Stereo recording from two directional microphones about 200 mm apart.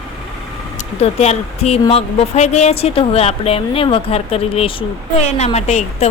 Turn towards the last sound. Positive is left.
turn(degrees=35)  # may be behind; listen again after turning